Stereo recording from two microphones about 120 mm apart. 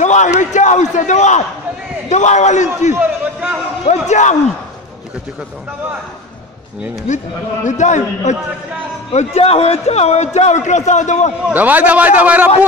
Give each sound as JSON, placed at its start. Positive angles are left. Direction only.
{"t": 0.0, "sound": "a man's voice", "side_deg": 80}
{"t": 2.9, "sound": "a sound", "side_deg": -15}
{"t": 3.8, "sound": "a man's voice", "side_deg": 75}
{"t": 7.6, "sound": "a man's voice", "side_deg": 80}
{"t": 9.1, "sound": "a man's voice", "side_deg": 60}
{"t": 11.4, "sound": "a man's voice", "side_deg": -15}